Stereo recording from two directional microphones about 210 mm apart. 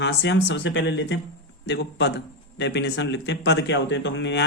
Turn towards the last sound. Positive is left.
turn(degrees=55)  # may be behind; listen again after turning